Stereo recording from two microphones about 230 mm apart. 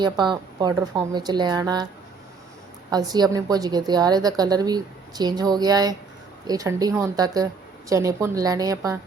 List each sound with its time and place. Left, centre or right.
0.0 s a woman's voice: centre
2.9 s a woman's voice: centre